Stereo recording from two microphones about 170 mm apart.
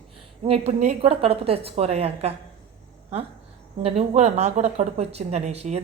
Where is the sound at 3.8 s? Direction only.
40° right (ahead or behind).